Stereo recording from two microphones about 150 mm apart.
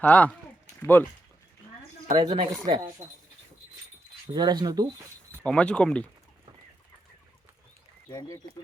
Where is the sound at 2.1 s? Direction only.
35° right (ahead or behind).